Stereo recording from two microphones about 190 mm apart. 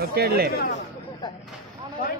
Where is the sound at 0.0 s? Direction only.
55° right (ahead or behind).